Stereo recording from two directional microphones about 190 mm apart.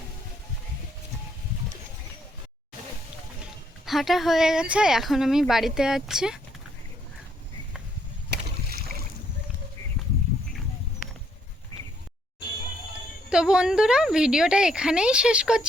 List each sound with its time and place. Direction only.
3.8 s speech: centre (ahead or behind)
8.3 s boat: 55° right (ahead or behind)
13.3 s speech: 5° right (ahead or behind)